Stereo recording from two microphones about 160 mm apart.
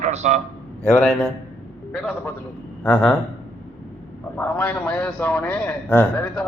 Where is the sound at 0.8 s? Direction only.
5° left (ahead or behind).